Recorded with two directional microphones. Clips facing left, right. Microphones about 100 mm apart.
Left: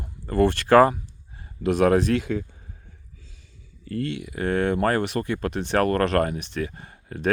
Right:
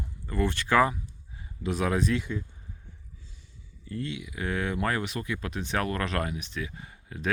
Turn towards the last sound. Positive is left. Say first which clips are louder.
# left 7 dB
turn(degrees=55)  # may be behind; listen again after turning